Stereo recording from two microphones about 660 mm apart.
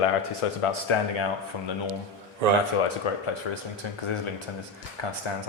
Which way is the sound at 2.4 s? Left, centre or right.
Right.